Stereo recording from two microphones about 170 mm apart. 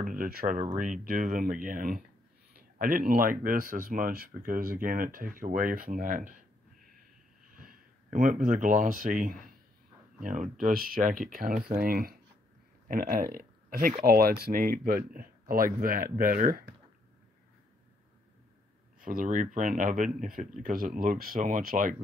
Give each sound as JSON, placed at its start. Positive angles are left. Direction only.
{"t": 0.0, "sound": "speech", "side_deg": -55}
{"t": 7.5, "sound": "speech", "side_deg": -55}
{"t": 18.9, "sound": "speech", "side_deg": -50}